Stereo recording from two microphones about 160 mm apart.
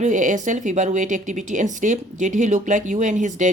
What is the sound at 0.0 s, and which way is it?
A woman's voice, 50° right (ahead or behind).